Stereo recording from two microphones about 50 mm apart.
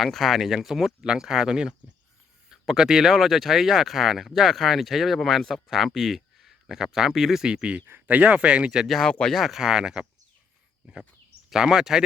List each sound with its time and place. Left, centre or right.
0.0 s speech: centre
8.0 s speech: right
9.0 s speech: centre
9.3 s speech: centre
11.5 s speech: centre